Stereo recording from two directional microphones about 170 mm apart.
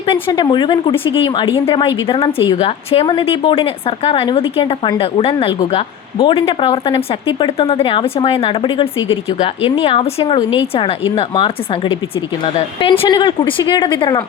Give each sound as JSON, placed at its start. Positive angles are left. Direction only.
{"t": 0.0, "sound": "a woman's voice", "side_deg": 30}